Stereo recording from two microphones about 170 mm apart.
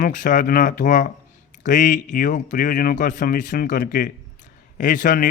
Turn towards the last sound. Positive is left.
turn(degrees=50)  # may be behind; listen again after turning